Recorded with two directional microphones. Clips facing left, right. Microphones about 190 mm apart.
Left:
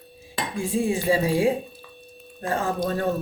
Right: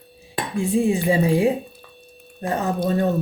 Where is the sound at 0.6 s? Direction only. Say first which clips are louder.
Right 4 dB; 20° right (ahead or behind).